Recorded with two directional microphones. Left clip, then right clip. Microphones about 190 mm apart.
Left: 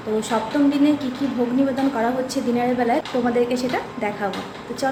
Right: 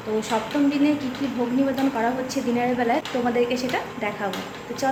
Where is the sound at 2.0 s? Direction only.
5° left (ahead or behind).